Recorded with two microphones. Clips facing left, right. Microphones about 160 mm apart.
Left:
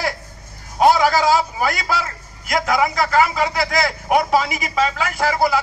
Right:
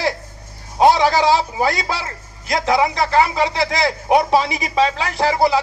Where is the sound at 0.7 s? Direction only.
30° right (ahead or behind).